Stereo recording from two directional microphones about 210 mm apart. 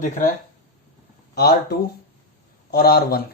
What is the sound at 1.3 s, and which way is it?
Speech, 50° left (ahead or behind).